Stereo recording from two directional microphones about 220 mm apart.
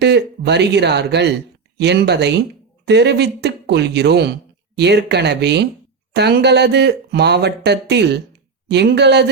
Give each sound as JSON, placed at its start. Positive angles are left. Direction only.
{"t": 0.0, "sound": "speech", "side_deg": -50}